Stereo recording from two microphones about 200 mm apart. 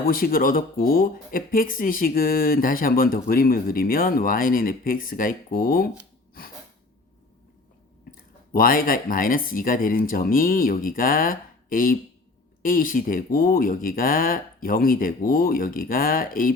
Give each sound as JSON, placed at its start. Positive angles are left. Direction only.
{"t": 0.1, "sound": "speech", "side_deg": 45}
{"t": 6.4, "sound": "sneeze", "side_deg": 45}
{"t": 8.1, "sound": "a sound", "side_deg": 45}
{"t": 8.5, "sound": "speech", "side_deg": 45}